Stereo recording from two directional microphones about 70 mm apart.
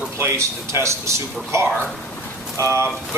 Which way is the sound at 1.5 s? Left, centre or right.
Right.